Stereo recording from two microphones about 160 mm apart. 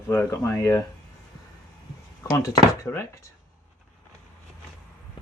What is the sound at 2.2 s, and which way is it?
Speech, 20° left (ahead or behind).